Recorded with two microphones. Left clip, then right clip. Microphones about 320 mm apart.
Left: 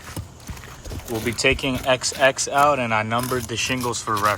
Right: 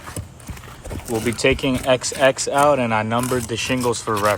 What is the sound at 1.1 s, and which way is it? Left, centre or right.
Speech, centre.